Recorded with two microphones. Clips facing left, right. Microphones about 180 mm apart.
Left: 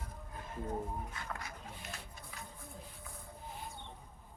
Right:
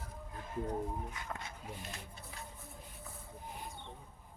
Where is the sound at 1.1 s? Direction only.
25° right (ahead or behind).